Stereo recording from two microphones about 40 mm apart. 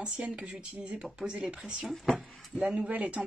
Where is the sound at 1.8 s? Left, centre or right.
Centre.